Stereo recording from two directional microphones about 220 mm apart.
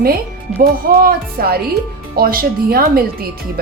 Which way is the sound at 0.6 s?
45° right (ahead or behind).